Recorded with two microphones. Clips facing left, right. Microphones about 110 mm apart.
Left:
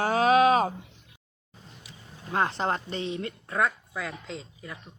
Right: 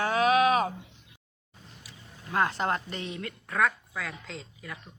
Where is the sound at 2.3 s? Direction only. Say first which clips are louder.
Even; 25° left (ahead or behind).